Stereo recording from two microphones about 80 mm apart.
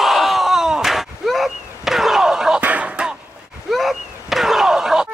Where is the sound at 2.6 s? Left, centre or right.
Centre.